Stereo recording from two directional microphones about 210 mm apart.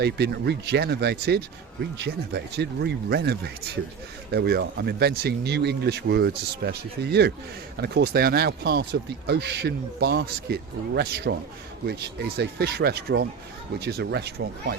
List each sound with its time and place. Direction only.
0.0 s speech: 50° right (ahead or behind)